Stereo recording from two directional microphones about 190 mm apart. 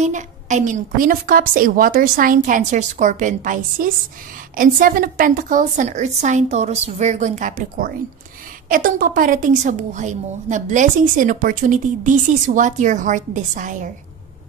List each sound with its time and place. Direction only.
0.0 s a woman's voice: 40° right (ahead or behind)